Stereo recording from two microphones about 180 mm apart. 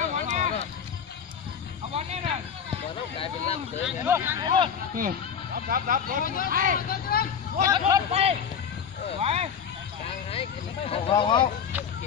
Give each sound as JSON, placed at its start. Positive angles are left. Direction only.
{"t": 0.1, "sound": "a sound", "side_deg": -40}
{"t": 2.0, "sound": "a sound", "side_deg": -35}
{"t": 3.8, "sound": "speech", "side_deg": -10}
{"t": 4.4, "sound": "a sound", "side_deg": -25}
{"t": 4.9, "sound": "speech", "side_deg": -50}
{"t": 6.2, "sound": "speech", "side_deg": 50}
{"t": 6.5, "sound": "speech", "side_deg": -50}
{"t": 6.9, "sound": "speech", "side_deg": 55}
{"t": 7.6, "sound": "a man's voice", "side_deg": -20}
{"t": 8.1, "sound": "a man's voice", "side_deg": -35}
{"t": 10.9, "sound": "speech", "side_deg": 25}